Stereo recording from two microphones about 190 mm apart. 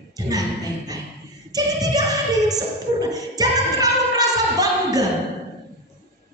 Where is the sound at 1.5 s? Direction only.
20° right (ahead or behind).